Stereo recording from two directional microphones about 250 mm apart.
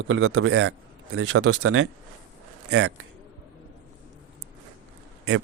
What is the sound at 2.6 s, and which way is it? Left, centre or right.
Speech, right.